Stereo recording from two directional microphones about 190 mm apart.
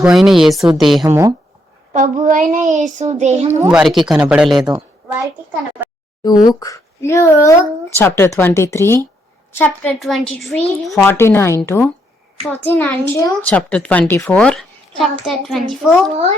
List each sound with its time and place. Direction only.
0.0 s a child's voice: centre (ahead or behind)
1.0 s speech: 15° right (ahead or behind)
1.9 s a child's voice: 40° right (ahead or behind)
3.7 s a child's voice: 5° right (ahead or behind)
6.2 s a child's voice: 20° left (ahead or behind); by 15.6 s centre (ahead or behind)